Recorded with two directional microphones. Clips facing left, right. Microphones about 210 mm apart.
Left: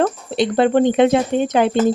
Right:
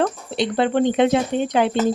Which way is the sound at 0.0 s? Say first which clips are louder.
Left 3 dB; 45° left (ahead or behind).